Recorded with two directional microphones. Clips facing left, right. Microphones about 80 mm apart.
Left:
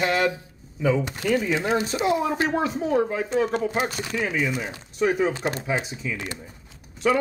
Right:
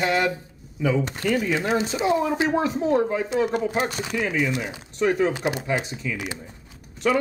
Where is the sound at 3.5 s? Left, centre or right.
Centre.